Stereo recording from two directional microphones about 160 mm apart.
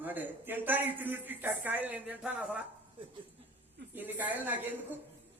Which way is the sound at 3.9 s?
10° right (ahead or behind).